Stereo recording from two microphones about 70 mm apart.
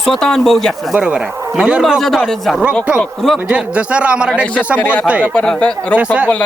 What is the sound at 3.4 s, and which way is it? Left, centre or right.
A man's voice, centre.